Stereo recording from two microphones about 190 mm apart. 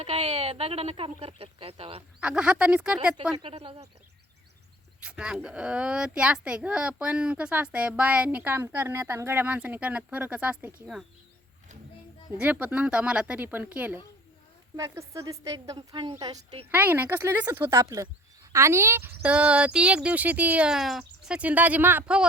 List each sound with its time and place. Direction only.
0.0 s speech: 35° right (ahead or behind)
2.2 s speech: 5° right (ahead or behind)
3.3 s speech: 30° right (ahead or behind)
4.9 s a child's voice: 5° right (ahead or behind)
12.4 s a child's voice: 5° right (ahead or behind)